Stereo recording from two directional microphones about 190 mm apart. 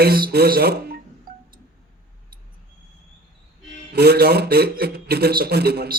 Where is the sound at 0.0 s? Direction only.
55° right (ahead or behind).